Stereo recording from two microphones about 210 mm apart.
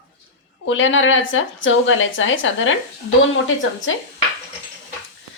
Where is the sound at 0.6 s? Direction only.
65° left (ahead or behind).